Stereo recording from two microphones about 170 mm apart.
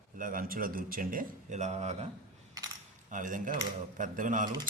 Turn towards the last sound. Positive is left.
turn(degrees=-50)  # may be behind; listen again after turning